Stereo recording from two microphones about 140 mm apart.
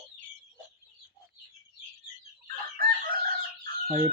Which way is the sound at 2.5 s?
90° right.